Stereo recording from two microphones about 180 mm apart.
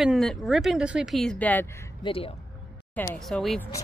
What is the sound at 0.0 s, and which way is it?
A woman's voice, centre (ahead or behind).